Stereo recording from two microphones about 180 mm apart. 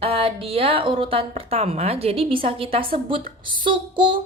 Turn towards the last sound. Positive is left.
turn(degrees=-25)  # may be behind; listen again after turning